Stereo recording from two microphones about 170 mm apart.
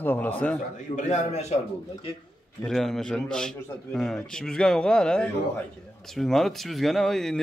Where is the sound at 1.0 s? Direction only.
45° left (ahead or behind).